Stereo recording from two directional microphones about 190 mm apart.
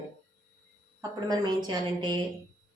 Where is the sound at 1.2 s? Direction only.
20° right (ahead or behind).